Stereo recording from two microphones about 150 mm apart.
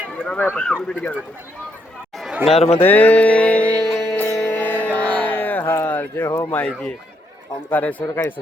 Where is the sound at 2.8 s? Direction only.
10° left (ahead or behind).